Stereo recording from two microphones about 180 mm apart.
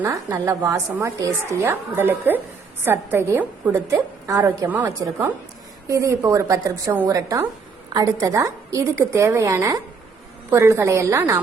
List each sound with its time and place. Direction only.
0.0 s a woman's voice: 15° right (ahead or behind)